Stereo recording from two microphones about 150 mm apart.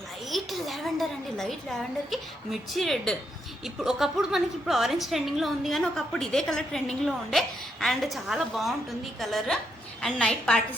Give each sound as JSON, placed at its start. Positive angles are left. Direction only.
{"t": 0.3, "sound": "a woman's voice", "side_deg": 0}